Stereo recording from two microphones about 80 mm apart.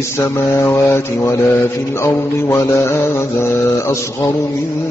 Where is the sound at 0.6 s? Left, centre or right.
Left.